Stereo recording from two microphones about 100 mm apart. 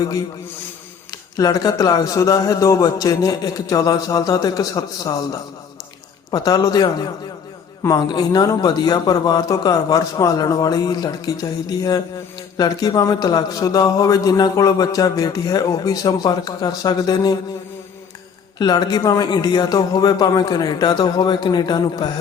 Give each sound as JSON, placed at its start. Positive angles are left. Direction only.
{"t": 1.4, "sound": "a man's voice", "side_deg": 40}
{"t": 18.6, "sound": "speech", "side_deg": 45}